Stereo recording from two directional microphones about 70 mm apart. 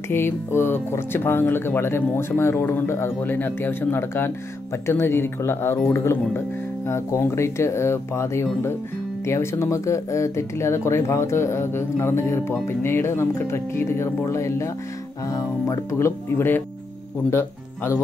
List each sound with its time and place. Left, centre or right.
0.1 s speech: left